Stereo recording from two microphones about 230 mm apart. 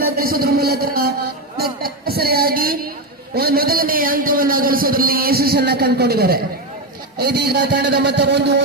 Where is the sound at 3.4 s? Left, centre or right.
Right.